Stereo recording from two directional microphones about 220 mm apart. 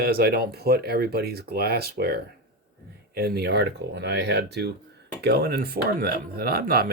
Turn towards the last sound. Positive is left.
turn(degrees=-45)  # may be behind; listen again after turning